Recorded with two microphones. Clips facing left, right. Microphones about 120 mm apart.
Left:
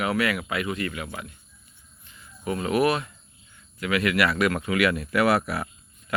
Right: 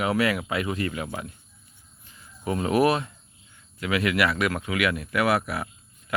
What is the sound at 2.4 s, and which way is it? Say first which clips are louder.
Speech: right 1 dB; 25° right (ahead or behind).